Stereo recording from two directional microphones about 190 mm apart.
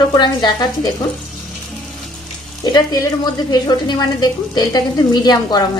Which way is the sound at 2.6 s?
20° left (ahead or behind).